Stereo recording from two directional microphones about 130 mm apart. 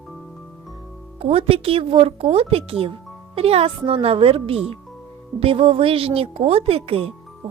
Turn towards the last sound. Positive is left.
turn(degrees=-55)  # may be behind; listen again after turning